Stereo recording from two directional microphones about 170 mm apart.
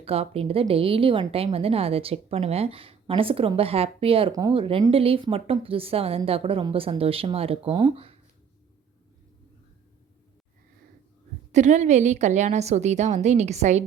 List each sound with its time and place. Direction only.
0.0 s a woman's voice: 35° right (ahead or behind)
11.5 s a woman's voice: 45° right (ahead or behind)